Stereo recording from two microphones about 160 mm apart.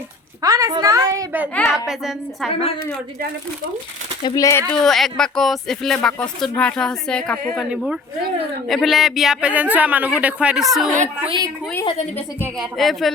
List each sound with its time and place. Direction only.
0.4 s a child's voice: 20° right (ahead or behind)
1.9 s speech: centre (ahead or behind)
2.5 s a woman's voice: 35° left (ahead or behind)
4.2 s speech: 25° left (ahead or behind)
4.7 s speech: 5° left (ahead or behind)
11.3 s a child's voice: 25° right (ahead or behind)
12.5 s speech: centre (ahead or behind)